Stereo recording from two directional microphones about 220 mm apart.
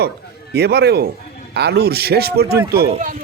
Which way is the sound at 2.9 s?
35° right (ahead or behind).